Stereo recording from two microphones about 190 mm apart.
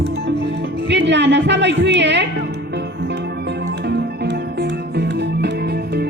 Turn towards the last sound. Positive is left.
turn(degrees=-60)  # may be behind; listen again after turning